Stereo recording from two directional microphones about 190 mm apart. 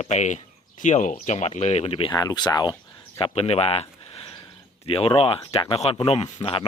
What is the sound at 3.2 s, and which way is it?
Speech, 30° left (ahead or behind).